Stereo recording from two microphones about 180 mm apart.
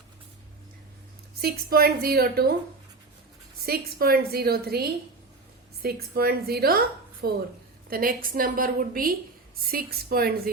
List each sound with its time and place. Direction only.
1.4 s a woman's voice: 60° right (ahead or behind)
3.7 s a woman's voice: 60° right (ahead or behind)